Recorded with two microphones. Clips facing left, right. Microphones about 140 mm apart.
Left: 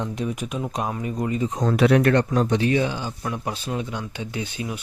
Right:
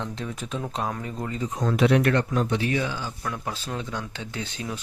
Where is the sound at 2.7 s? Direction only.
20° left (ahead or behind).